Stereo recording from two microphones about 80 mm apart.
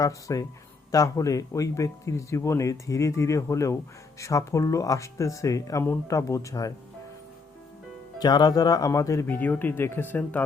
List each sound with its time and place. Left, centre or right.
0.0 s speech: left
8.2 s speech: left
8.9 s speech: left
9.2 s speech: left